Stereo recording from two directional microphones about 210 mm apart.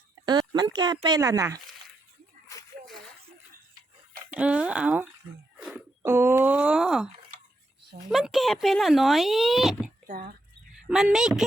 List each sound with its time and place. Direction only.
0.3 s speech: 20° right (ahead or behind)
4.3 s speech: 5° right (ahead or behind)
8.1 s speech: centre (ahead or behind)
10.1 s speech: 45° right (ahead or behind)
10.8 s speech: centre (ahead or behind)